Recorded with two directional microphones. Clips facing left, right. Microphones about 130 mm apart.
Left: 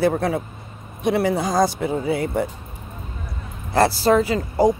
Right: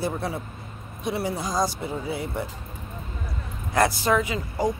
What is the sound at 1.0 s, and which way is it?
Speech, 80° left.